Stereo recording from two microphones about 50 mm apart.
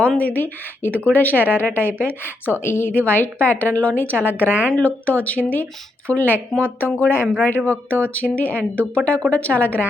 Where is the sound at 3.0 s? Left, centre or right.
Left.